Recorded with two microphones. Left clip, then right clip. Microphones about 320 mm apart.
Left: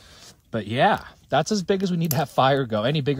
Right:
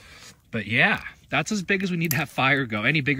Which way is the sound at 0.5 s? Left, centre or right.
Centre.